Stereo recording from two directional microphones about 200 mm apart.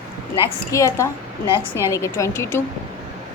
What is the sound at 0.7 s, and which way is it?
A woman's voice, 15° left (ahead or behind).